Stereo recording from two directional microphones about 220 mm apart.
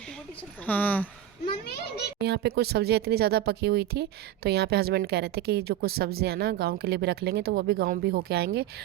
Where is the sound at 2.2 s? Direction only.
50° right (ahead or behind).